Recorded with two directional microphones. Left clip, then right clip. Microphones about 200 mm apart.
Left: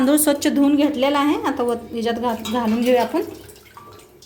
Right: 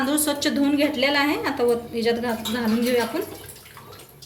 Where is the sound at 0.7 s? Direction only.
40° left (ahead or behind).